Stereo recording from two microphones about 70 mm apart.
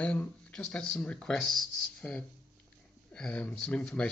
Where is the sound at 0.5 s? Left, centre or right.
Centre.